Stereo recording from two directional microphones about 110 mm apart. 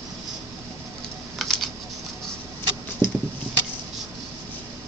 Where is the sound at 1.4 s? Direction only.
Centre (ahead or behind).